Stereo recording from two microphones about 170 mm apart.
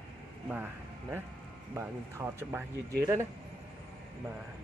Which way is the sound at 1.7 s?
15° right (ahead or behind).